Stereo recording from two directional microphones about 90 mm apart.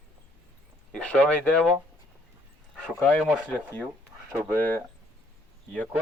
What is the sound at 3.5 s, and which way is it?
Speech, 15° left (ahead or behind).